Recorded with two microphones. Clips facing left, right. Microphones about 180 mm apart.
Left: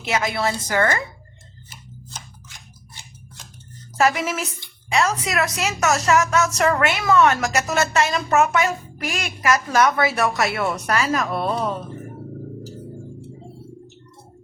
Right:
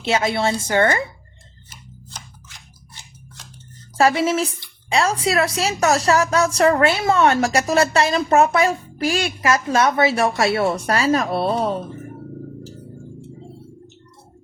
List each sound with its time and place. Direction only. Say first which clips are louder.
0.0 s a woman's voice: right 3 dB; 30° right (ahead or behind)
3.9 s a woman's voice: right 4 dB; 30° right (ahead or behind)